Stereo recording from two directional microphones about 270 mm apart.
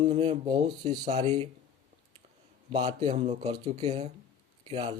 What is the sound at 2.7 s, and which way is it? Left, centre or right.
Speech, right.